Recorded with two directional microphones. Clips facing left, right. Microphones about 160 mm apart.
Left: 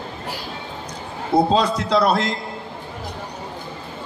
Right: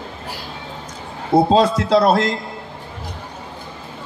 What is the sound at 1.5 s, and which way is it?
Speech, 35° right (ahead or behind).